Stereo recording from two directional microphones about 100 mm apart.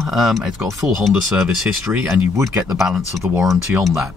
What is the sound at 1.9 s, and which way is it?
Speech, 15° right (ahead or behind).